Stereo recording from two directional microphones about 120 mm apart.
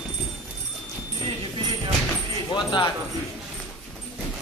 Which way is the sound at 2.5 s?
40° left (ahead or behind).